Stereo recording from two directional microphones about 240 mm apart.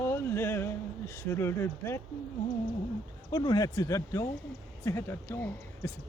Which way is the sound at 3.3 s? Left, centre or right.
Centre.